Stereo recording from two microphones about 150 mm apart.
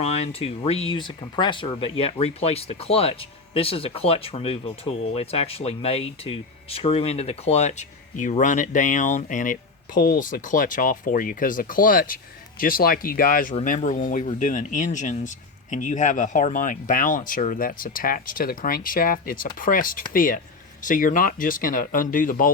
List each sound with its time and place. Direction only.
0.0 s speech: 45° left (ahead or behind); by 13.6 s 70° left (ahead or behind)
13.7 s speech: 55° left (ahead or behind)